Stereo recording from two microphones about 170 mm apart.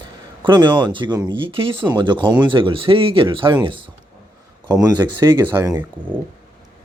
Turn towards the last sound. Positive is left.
turn(degrees=-10)  # may be behind; listen again after turning